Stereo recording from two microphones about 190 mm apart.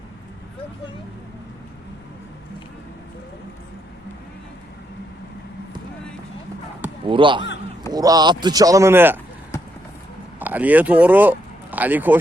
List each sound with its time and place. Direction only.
7.1 s speech: 25° right (ahead or behind)
10.4 s speech: 10° right (ahead or behind)